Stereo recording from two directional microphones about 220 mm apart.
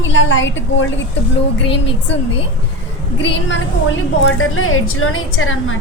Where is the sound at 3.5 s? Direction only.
60° left (ahead or behind).